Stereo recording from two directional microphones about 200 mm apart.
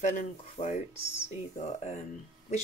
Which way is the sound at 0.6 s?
20° left (ahead or behind).